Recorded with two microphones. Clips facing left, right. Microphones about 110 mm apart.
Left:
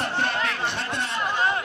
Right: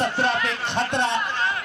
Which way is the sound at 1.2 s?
15° left (ahead or behind).